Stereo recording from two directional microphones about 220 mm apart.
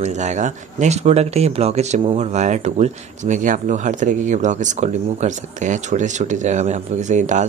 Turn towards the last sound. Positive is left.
turn(degrees=-35)  # may be behind; listen again after turning